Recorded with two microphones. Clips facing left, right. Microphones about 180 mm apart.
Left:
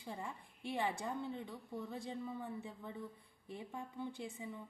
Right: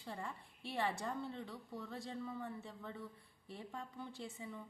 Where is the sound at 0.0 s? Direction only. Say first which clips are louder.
Left 1 dB; 15° left (ahead or behind).